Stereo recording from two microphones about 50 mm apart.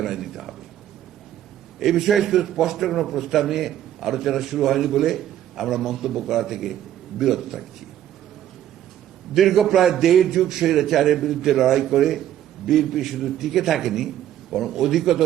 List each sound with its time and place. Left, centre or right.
0.0 s a man's voice: centre
1.8 s a man's voice: centre
9.3 s a man's voice: centre